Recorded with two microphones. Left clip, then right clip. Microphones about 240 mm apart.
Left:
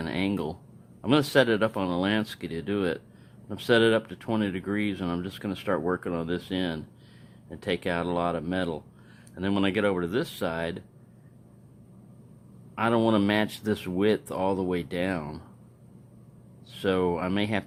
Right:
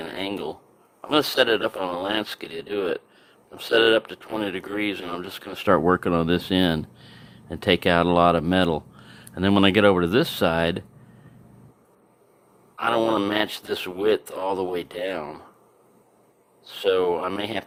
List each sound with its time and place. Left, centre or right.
0.0 s a sound: centre
1.0 s speech: centre
12.9 s speech: centre
16.6 s speech: centre